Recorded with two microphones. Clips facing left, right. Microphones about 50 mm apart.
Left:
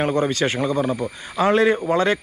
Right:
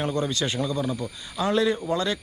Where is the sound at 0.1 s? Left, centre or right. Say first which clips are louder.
Left 6 dB; left.